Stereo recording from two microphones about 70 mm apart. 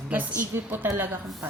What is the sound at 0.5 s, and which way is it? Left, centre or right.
Speech, right.